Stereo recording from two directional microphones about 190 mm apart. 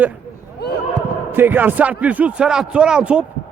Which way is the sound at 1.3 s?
10° right (ahead or behind).